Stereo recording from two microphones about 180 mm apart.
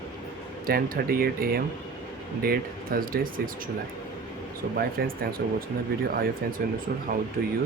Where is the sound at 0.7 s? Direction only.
55° right (ahead or behind).